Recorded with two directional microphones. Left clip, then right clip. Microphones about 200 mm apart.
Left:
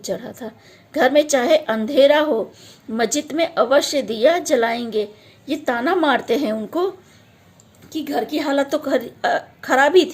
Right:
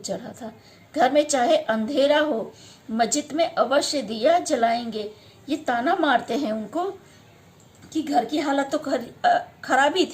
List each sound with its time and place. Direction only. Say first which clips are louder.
0.0 s a woman's voice: left 5 dB; 40° left (ahead or behind)
7.9 s speech: even; 45° left (ahead or behind)